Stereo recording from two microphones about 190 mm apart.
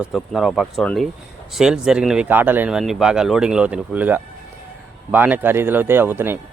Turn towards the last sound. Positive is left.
turn(degrees=-10)  # may be behind; listen again after turning